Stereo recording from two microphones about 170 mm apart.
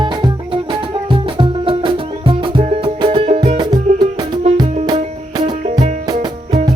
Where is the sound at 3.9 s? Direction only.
25° right (ahead or behind).